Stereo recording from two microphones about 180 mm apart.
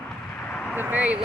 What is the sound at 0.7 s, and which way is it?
Speech, 10° right (ahead or behind).